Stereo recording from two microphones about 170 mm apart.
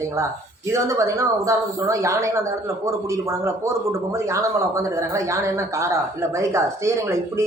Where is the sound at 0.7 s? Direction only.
20° right (ahead or behind).